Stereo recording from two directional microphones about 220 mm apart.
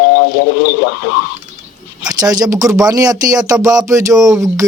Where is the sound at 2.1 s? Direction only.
15° right (ahead or behind).